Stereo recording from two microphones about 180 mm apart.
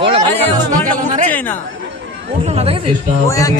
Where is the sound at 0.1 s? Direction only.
40° right (ahead or behind).